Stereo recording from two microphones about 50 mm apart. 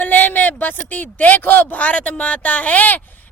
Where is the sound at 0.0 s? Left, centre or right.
Left.